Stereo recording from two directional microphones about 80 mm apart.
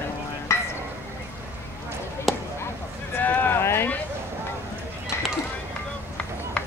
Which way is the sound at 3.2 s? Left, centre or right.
Left.